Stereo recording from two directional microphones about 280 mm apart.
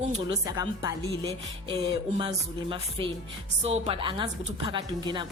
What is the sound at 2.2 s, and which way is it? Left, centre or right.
A woman's voice, centre.